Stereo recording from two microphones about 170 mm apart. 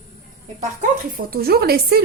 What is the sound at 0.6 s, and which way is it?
Speech, 50° right (ahead or behind).